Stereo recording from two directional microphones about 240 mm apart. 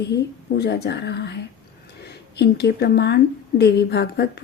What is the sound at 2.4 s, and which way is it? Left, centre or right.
A woman's voice, left.